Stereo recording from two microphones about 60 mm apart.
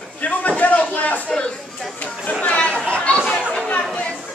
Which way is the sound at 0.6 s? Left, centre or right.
Left.